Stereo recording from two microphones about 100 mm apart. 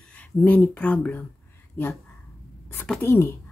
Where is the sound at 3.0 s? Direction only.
25° left (ahead or behind).